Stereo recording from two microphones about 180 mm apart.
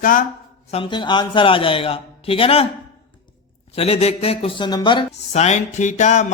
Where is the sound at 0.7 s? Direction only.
25° left (ahead or behind).